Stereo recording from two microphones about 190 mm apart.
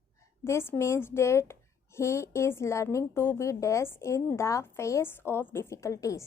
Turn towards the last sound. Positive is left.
turn(degrees=15)  # may be behind; listen again after turning